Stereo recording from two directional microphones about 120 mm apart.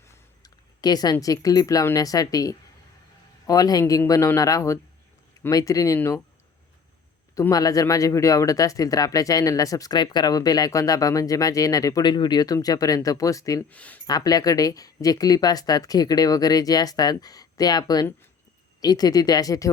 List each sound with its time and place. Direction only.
0.4 s a sound: 35° left (ahead or behind)
1.2 s speech: 30° left (ahead or behind)
7.3 s speech: 30° left (ahead or behind)
13.7 s speech: 10° left (ahead or behind)
14.1 s speech: 30° left (ahead or behind)